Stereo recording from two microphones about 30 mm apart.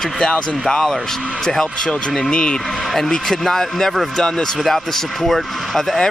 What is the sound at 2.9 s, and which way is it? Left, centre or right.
Speech, centre.